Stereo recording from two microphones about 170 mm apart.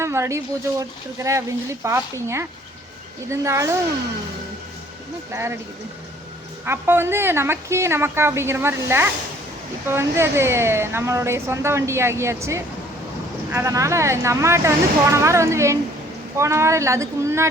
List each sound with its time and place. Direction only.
0.0 s speech: 15° right (ahead or behind)
5.3 s speech: 15° right (ahead or behind)
6.7 s speech: 15° right (ahead or behind)